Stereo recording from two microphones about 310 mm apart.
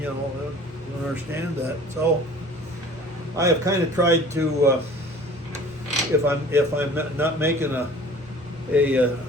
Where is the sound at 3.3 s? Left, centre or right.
Centre.